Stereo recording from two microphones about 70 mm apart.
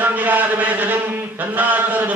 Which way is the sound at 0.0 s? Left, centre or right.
Right.